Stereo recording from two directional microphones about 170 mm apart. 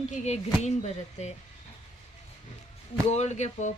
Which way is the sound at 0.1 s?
40° left (ahead or behind).